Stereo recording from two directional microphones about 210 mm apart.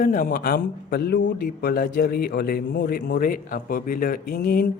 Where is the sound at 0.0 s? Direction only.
45° left (ahead or behind).